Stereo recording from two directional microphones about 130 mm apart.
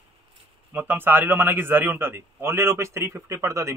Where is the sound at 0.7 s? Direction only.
15° right (ahead or behind).